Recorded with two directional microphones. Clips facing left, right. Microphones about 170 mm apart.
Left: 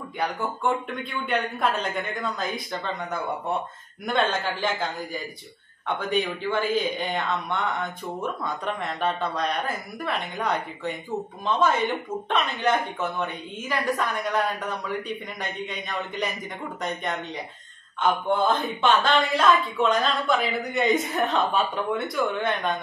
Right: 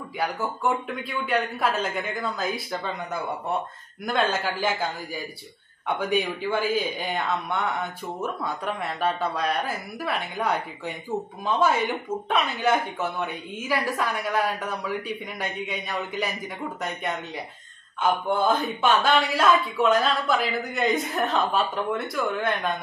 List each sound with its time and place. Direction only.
0.2 s speech: 5° right (ahead or behind)
5.9 s speech: 10° right (ahead or behind)
18.0 s speech: 5° right (ahead or behind)